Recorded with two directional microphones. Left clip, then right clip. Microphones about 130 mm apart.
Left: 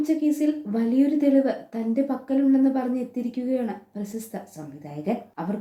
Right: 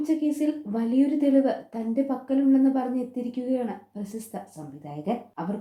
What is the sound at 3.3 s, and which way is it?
Speech, 25° right (ahead or behind).